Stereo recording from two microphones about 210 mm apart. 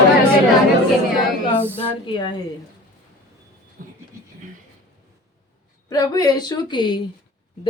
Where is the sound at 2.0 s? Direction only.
20° left (ahead or behind).